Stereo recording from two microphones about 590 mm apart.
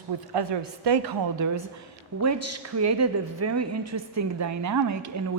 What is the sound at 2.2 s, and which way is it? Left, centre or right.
A woman's voice, right.